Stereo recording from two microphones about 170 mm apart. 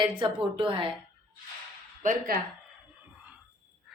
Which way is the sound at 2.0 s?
50° right (ahead or behind).